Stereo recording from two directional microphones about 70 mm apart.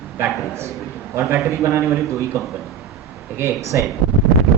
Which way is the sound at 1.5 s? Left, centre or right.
Right.